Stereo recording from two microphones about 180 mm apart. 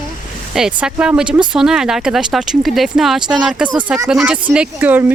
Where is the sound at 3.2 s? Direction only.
25° right (ahead or behind).